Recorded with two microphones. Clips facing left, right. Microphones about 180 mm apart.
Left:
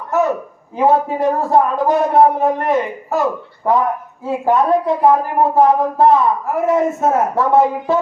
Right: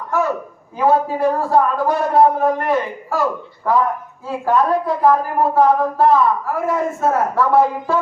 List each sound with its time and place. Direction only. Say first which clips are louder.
0.1 s a sound: left 3 dB; 20° left (ahead or behind)
0.8 s a woman's voice: left 1 dB; 20° left (ahead or behind)
4.3 s a woman's voice: left 2 dB; 20° left (ahead or behind)